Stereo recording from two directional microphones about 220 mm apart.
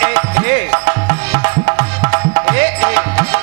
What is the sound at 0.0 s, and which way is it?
Music, 15° right (ahead or behind).